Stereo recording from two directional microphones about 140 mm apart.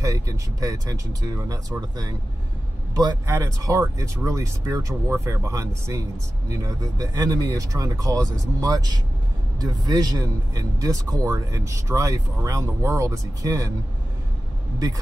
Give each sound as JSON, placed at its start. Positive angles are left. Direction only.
{"t": 0.0, "sound": "a man's voice", "side_deg": -25}